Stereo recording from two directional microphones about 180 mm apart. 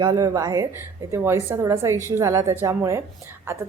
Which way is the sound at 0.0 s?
20° right (ahead or behind).